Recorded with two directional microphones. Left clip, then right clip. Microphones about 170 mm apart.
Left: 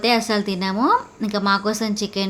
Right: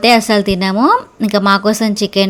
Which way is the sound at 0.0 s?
40° right (ahead or behind).